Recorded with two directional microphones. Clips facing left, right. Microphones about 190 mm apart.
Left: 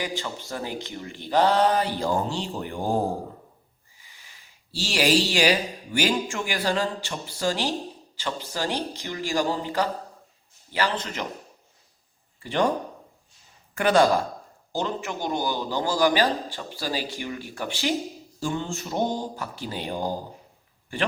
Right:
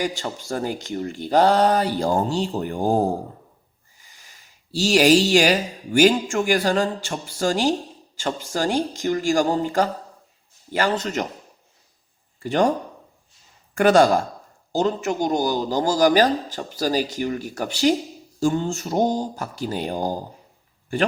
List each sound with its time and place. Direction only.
0.0 s speech: 45° right (ahead or behind)
4.0 s speech: 45° right (ahead or behind)
12.4 s speech: 45° right (ahead or behind)
13.7 s speech: 45° right (ahead or behind)